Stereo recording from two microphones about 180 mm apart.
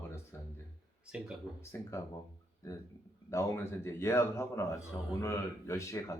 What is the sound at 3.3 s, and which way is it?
Speech, 15° left (ahead or behind).